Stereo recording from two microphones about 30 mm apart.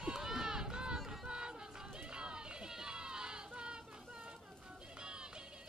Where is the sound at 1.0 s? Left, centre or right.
Right.